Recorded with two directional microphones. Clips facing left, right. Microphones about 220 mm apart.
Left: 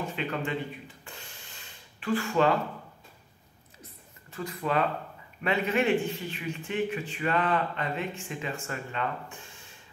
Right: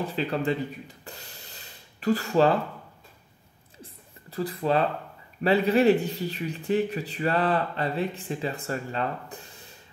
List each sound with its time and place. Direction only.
0.0 s a man's voice: 35° right (ahead or behind)
3.8 s a sound: 35° right (ahead or behind)
5.4 s a man's voice: 35° right (ahead or behind)